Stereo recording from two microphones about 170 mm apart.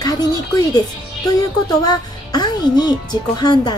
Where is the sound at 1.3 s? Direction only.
20° left (ahead or behind).